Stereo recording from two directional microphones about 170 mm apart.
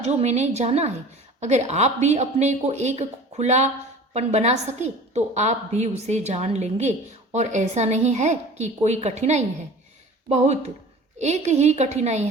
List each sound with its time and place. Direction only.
0.0 s a woman's voice: 40° right (ahead or behind)